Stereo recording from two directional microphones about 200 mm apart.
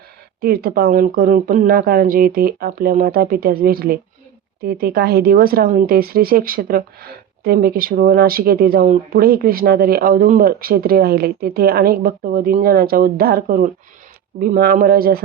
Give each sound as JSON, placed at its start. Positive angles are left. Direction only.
{"t": 0.4, "sound": "speech", "side_deg": -50}